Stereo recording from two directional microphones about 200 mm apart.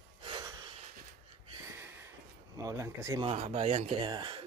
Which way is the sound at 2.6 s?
15° right (ahead or behind).